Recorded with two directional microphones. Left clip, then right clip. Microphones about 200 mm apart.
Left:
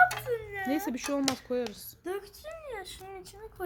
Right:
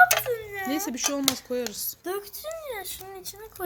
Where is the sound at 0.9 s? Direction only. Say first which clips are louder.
Right 4 dB; 10° left (ahead or behind).